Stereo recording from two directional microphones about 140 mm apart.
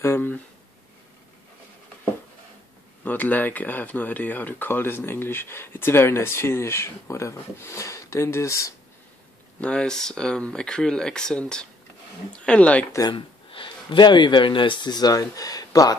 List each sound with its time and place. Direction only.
0.0 s speech: 15° left (ahead or behind)
3.0 s speech: 15° left (ahead or behind)
9.6 s speech: 5° left (ahead or behind)
13.1 s speech: 40° left (ahead or behind)